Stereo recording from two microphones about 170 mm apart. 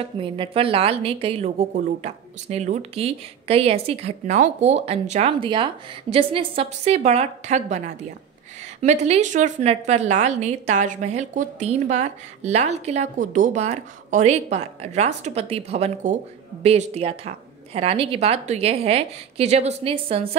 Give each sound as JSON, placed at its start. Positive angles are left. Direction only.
{"t": 0.0, "sound": "a woman's voice", "side_deg": -30}
{"t": 5.4, "sound": "a woman's voice", "side_deg": -30}